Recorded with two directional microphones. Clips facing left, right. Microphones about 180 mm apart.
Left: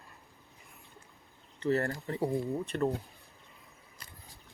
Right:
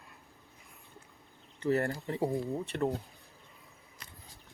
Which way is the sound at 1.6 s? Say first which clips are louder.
Even; 15° right (ahead or behind).